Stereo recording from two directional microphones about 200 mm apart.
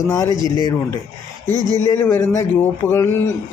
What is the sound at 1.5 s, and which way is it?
Speech, 20° right (ahead or behind).